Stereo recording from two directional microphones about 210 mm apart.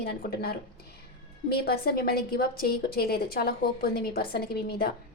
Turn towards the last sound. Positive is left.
turn(degrees=45)  # may be behind; listen again after turning